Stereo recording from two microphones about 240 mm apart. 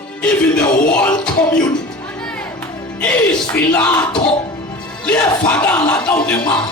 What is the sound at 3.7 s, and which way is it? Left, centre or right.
Speech, centre.